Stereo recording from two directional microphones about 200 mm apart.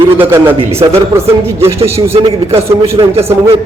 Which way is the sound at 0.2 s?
10° right (ahead or behind).